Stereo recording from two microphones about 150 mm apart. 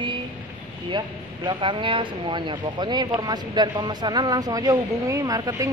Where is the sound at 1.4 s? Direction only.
35° right (ahead or behind).